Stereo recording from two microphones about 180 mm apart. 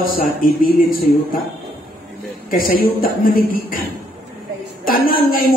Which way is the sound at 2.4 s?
50° left (ahead or behind).